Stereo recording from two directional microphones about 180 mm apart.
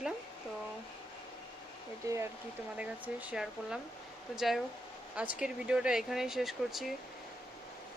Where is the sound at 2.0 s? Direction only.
15° right (ahead or behind); by 6.9 s centre (ahead or behind).